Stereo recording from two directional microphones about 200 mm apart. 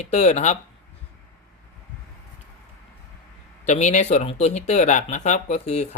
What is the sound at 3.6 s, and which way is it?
Speech, 35° left (ahead or behind).